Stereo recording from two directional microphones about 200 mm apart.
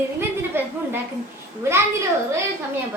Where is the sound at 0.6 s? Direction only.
10° right (ahead or behind).